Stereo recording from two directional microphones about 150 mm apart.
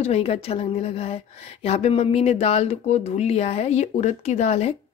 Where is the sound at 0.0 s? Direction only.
45° left (ahead or behind).